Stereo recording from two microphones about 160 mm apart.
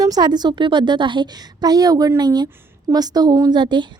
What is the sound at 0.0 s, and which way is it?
A woman's voice, 25° right (ahead or behind).